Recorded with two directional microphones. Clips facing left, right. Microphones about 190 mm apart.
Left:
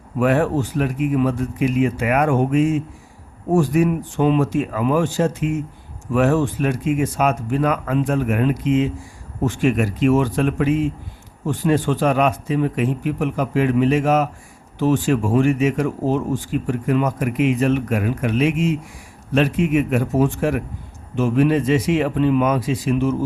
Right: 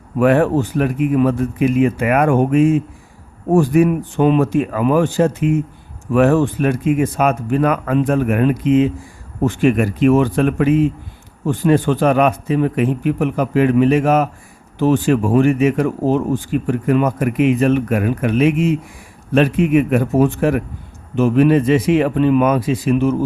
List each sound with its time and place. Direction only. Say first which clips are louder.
0.2 s speech: right 4 dB; 55° right (ahead or behind)